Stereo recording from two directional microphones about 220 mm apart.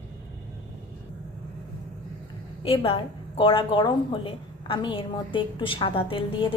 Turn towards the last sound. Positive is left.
turn(degrees=25)  # may be behind; listen again after turning